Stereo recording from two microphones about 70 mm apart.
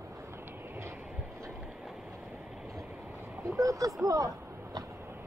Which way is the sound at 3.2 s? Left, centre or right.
Right.